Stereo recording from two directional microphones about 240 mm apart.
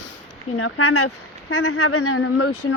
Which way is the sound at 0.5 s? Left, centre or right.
Left.